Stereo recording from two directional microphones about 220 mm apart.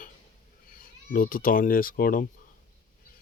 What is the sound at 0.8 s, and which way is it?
Speech, 40° left (ahead or behind).